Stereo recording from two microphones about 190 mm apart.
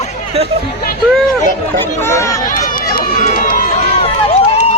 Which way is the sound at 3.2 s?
45° left (ahead or behind).